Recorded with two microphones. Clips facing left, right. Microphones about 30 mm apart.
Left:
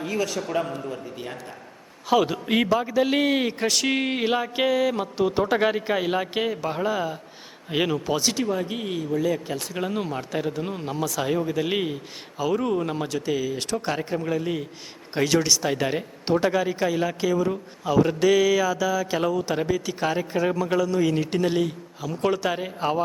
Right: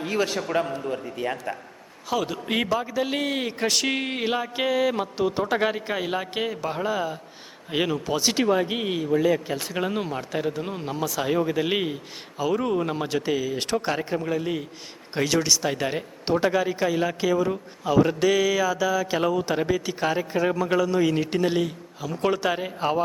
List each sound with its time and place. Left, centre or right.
0.0 s a man's voice: right
0.4 s speech: right
1.1 s a man's voice: right
2.0 s a man's voice: centre
2.5 s speech: centre
8.4 s speech: right; by 13.1 s centre
13.1 s speech: centre
13.3 s speech: centre
13.6 s speech: centre
13.8 s speech: centre